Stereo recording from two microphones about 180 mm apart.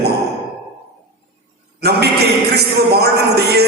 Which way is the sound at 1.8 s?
65° right (ahead or behind).